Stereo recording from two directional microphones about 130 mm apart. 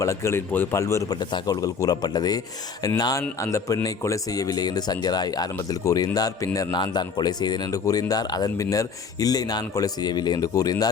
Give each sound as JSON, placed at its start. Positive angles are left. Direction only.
{"t": 0.0, "sound": "a man's voice", "side_deg": 20}